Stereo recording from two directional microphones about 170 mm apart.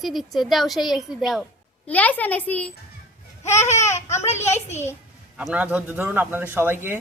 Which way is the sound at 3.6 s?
40° left (ahead or behind).